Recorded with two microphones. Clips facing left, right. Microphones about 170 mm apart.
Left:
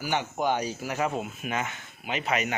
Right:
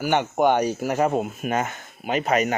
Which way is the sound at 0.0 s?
60° right (ahead or behind).